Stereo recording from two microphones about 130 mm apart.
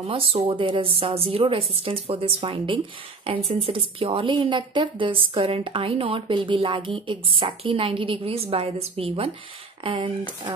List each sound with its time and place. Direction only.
0.0 s speech: 45° right (ahead or behind)